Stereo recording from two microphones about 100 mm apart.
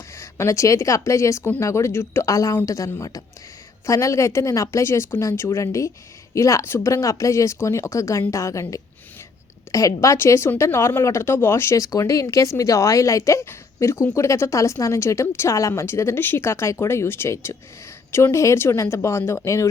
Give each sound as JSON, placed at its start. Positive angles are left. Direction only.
{"t": 0.2, "sound": "speech", "side_deg": 30}